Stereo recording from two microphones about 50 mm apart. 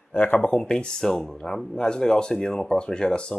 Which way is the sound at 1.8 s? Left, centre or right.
Centre.